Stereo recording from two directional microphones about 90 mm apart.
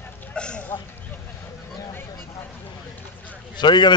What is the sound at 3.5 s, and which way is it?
Speech, 60° left (ahead or behind).